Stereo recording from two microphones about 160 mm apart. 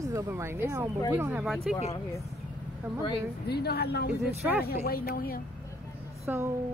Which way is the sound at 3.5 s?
90° left.